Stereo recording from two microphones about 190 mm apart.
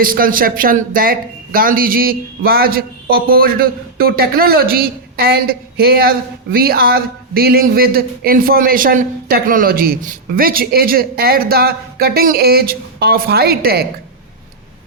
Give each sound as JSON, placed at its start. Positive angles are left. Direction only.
{"t": 0.0, "sound": "a man's voice", "side_deg": -50}